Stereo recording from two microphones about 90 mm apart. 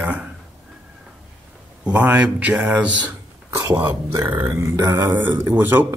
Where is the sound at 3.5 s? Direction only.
35° right (ahead or behind).